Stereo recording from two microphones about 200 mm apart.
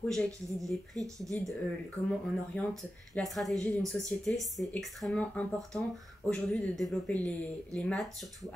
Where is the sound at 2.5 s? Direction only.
10° left (ahead or behind).